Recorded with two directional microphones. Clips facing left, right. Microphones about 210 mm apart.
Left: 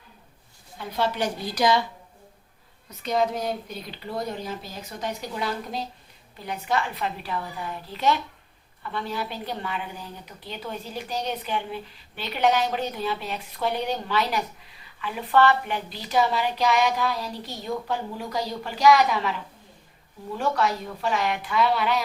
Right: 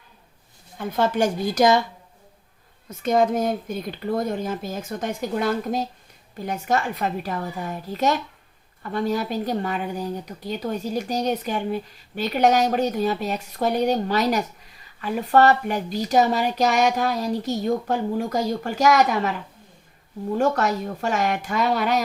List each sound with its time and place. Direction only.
0.8 s speech: 50° right (ahead or behind)
2.9 s speech: 50° right (ahead or behind)
20.3 s speech: 45° right (ahead or behind)